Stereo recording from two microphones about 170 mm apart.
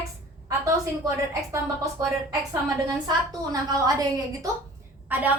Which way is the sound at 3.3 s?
20° right (ahead or behind).